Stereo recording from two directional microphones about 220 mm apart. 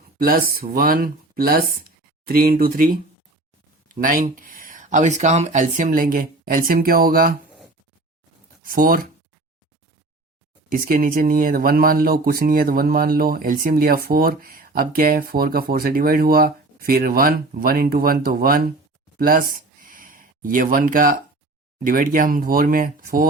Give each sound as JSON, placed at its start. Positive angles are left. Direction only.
{"t": 0.2, "sound": "speech", "side_deg": -40}
{"t": 8.6, "sound": "speech", "side_deg": -40}
{"t": 10.7, "sound": "speech", "side_deg": -40}
{"t": 19.2, "sound": "a sound", "side_deg": -40}
{"t": 21.8, "sound": "speech", "side_deg": -40}